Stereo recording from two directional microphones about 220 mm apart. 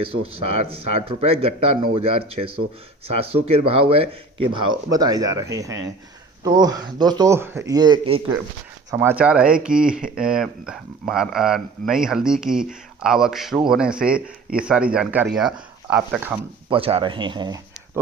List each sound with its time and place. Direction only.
0.3 s a man's voice: 25° right (ahead or behind)
8.9 s a man's voice: 10° right (ahead or behind)
16.6 s speech: 25° right (ahead or behind)